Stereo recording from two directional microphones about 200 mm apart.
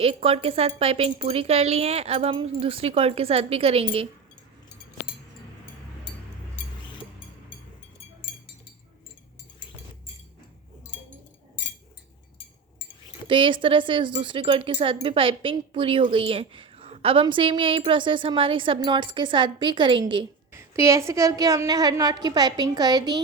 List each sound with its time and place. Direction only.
0.0 s speech: 30° right (ahead or behind)
13.2 s speech: 25° right (ahead or behind)
20.5 s speech: 15° right (ahead or behind)